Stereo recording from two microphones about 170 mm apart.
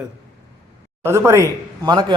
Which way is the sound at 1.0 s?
15° right (ahead or behind).